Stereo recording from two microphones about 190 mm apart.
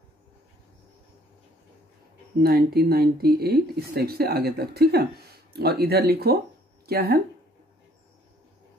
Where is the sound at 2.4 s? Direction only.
55° right (ahead or behind).